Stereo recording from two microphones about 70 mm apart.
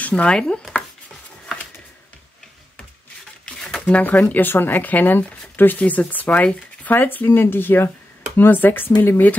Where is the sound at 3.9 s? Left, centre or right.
Left.